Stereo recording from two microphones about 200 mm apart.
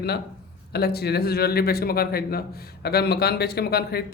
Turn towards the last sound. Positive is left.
turn(degrees=50)  # may be behind; listen again after turning